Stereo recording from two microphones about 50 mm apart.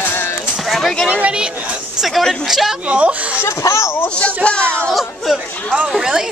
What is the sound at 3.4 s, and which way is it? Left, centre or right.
Speech, left.